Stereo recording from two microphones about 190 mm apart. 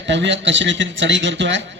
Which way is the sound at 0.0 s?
70° right (ahead or behind).